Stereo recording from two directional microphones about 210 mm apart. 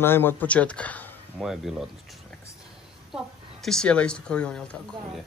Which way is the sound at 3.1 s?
Centre (ahead or behind).